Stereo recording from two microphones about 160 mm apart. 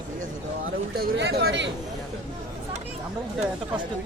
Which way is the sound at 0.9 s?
80° right.